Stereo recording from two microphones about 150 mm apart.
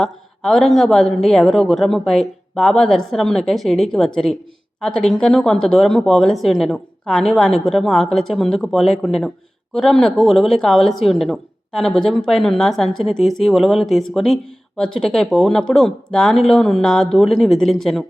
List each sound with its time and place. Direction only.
0.0 s speech: 5° left (ahead or behind)